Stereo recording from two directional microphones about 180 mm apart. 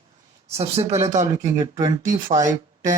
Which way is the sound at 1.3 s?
20° right (ahead or behind).